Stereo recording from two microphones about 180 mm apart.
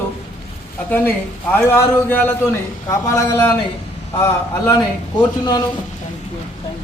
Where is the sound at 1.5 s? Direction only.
10° left (ahead or behind).